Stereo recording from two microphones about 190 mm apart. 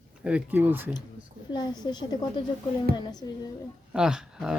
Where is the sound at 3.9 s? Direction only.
5° right (ahead or behind).